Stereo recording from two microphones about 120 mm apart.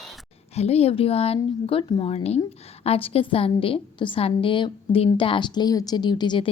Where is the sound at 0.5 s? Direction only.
60° left (ahead or behind).